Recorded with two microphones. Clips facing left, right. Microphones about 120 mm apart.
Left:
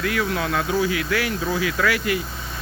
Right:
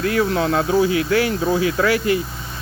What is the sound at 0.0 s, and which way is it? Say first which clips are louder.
Speech: right 5 dB; 35° right (ahead or behind).